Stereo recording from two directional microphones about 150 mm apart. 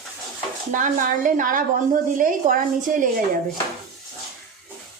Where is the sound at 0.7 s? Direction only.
60° right (ahead or behind).